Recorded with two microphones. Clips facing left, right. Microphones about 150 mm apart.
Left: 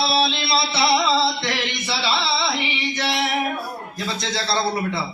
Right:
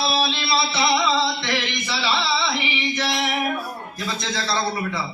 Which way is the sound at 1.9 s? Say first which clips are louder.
Even; 35° left (ahead or behind).